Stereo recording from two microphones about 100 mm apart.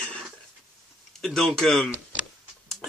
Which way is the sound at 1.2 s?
5° left (ahead or behind).